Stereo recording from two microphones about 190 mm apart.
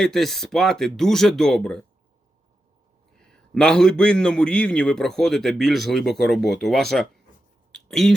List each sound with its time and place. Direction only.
0.0 s a man's voice: centre (ahead or behind)
3.2 s a man's voice: 5° left (ahead or behind)